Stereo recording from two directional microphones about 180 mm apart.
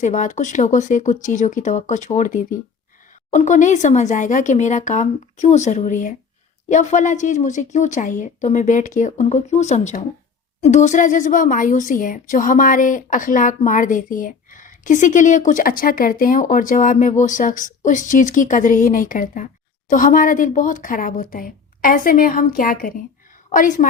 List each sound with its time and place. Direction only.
0.0 s a woman's voice: 45° left (ahead or behind)